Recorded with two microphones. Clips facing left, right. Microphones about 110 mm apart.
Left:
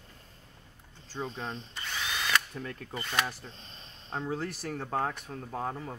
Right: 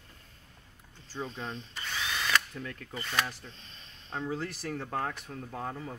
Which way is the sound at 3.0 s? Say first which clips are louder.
Left 1 dB; 10° left (ahead or behind).